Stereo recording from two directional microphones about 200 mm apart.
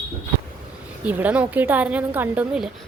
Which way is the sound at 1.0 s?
10° right (ahead or behind).